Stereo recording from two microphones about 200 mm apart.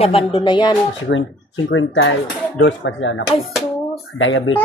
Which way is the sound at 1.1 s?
60° left (ahead or behind).